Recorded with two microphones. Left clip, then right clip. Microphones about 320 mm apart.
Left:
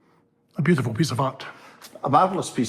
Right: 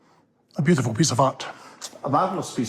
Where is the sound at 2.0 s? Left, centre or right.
Left.